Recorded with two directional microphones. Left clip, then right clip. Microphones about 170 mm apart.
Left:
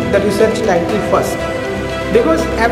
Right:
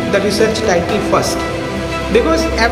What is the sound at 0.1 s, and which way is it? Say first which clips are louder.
A man's voice: left 1 dB; 5° left (ahead or behind).